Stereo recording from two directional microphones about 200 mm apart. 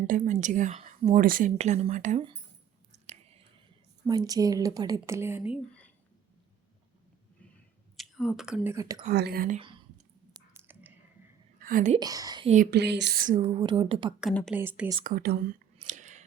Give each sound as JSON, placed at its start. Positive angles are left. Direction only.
{"t": 0.1, "sound": "speech", "side_deg": -40}
{"t": 2.9, "sound": "a sound", "side_deg": -35}
{"t": 4.0, "sound": "a woman's voice", "side_deg": -20}
{"t": 7.9, "sound": "speech", "side_deg": 0}
{"t": 8.7, "sound": "a woman's voice", "side_deg": -15}
{"t": 9.0, "sound": "speech", "side_deg": -50}
{"t": 9.6, "sound": "speech", "side_deg": -25}
{"t": 10.3, "sound": "a sound", "side_deg": -10}
{"t": 11.6, "sound": "speech", "side_deg": -40}
{"t": 11.9, "sound": "speech", "side_deg": -20}
{"t": 12.7, "sound": "a woman's voice", "side_deg": -60}
{"t": 13.2, "sound": "speech", "side_deg": -35}
{"t": 14.2, "sound": "a woman's voice", "side_deg": 0}
{"t": 15.0, "sound": "speech", "side_deg": -50}